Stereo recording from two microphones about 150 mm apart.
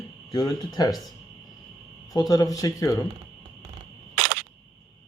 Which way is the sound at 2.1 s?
25° left (ahead or behind).